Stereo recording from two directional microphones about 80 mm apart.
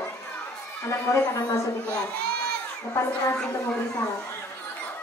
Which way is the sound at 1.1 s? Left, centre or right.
Left.